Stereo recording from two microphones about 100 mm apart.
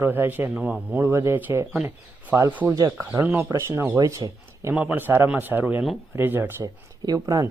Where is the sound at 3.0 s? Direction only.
20° right (ahead or behind).